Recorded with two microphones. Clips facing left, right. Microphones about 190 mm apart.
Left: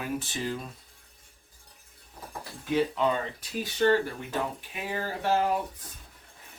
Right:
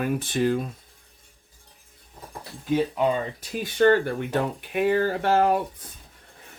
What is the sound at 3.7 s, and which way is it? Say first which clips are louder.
Speech: right 5 dB; 60° right (ahead or behind).